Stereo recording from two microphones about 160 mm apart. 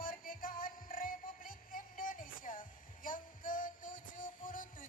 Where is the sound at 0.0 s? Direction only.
60° left (ahead or behind).